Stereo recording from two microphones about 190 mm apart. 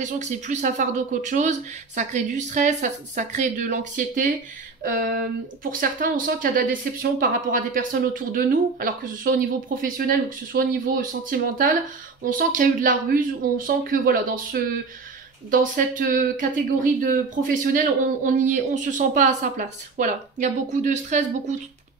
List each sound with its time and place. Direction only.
0.0 s speech: 40° right (ahead or behind)
5.6 s speech: 50° right (ahead or behind)